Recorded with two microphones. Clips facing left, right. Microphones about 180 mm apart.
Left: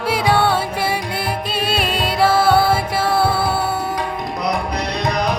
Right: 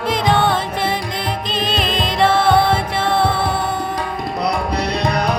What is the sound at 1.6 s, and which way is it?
Music, 10° left (ahead or behind).